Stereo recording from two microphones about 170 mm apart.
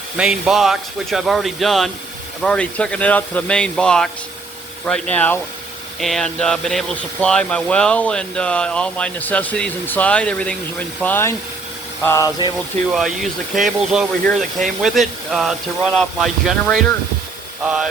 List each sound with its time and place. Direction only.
0.2 s speech: 5° right (ahead or behind); by 12.3 s 15° left (ahead or behind)
12.9 s speech: centre (ahead or behind)